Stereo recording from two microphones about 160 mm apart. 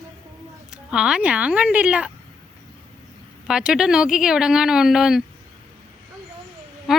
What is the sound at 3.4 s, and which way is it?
Speech, 5° right (ahead or behind).